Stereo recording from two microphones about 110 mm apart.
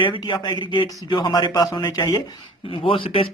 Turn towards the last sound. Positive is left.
turn(degrees=55)  # may be behind; listen again after turning